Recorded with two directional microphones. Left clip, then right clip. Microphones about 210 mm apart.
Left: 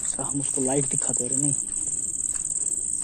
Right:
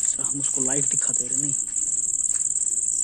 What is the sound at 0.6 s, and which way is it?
Speech, 10° right (ahead or behind).